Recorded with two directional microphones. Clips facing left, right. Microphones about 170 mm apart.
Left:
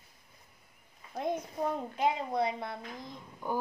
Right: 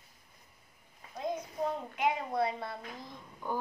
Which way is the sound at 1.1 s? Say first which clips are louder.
Left 3 dB; 60° left (ahead or behind).